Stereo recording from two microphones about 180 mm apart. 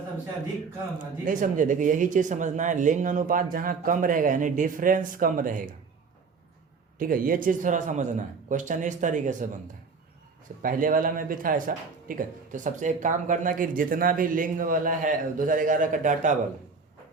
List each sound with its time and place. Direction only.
1.2 s speech: 45° right (ahead or behind)
7.0 s speech: 50° right (ahead or behind)
10.6 s speech: 50° right (ahead or behind)